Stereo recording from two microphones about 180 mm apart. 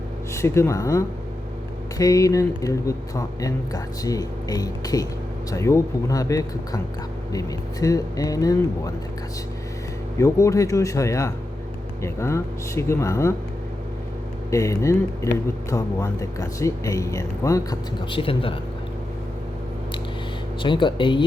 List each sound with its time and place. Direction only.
0.3 s speech: 15° left (ahead or behind)
10.2 s speech: 15° left (ahead or behind)
14.5 s speech: 15° left (ahead or behind)
20.6 s speech: 25° left (ahead or behind)